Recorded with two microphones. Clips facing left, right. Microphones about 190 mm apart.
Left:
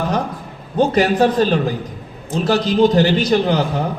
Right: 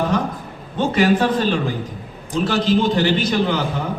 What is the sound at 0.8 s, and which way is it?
A man's voice, 40° left (ahead or behind).